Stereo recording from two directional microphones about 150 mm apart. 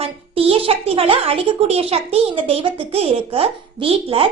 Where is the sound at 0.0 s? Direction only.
40° right (ahead or behind).